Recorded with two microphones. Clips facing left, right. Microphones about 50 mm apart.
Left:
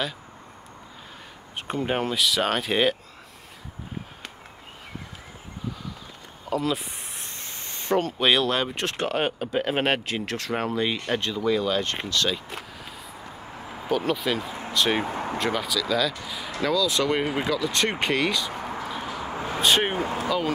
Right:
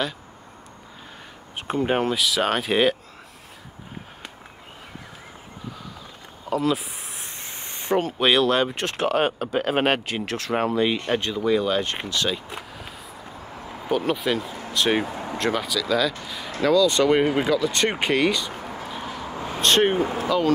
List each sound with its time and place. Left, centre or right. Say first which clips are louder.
1.7 s speech: right 4 dB; centre
6.5 s speech: right 3 dB; centre
7.3 s a sound: right 1 dB; centre
8.2 s speech: right 5 dB; centre
18.9 s a sound: left 1 dB; centre
20.2 s speech: right 5 dB; centre